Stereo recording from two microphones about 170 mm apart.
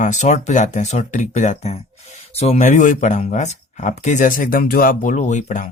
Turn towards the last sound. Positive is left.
turn(degrees=45)  # may be behind; listen again after turning